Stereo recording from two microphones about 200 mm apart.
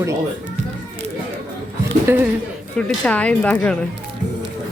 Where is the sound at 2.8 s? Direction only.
5° left (ahead or behind).